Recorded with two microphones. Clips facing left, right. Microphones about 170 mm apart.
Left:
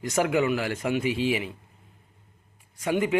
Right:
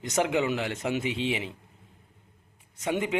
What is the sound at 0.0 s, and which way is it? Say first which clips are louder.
A man's voice: left 2 dB; 20° right (ahead or behind).